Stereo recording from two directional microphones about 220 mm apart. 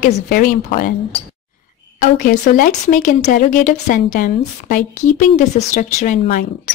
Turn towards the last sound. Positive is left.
turn(degrees=35)  # may be behind; listen again after turning